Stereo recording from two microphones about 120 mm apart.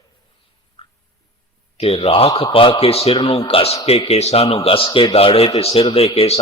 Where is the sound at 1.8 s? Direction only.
55° left (ahead or behind).